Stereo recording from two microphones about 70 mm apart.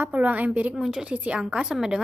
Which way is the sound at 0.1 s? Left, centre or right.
Right.